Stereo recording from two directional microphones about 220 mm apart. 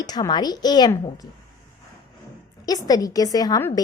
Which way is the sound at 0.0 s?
20° left (ahead or behind).